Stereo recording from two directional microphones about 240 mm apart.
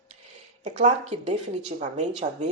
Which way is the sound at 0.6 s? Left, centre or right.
Right.